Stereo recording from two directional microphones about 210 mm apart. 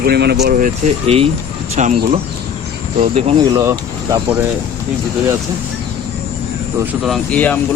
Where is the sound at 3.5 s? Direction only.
15° right (ahead or behind).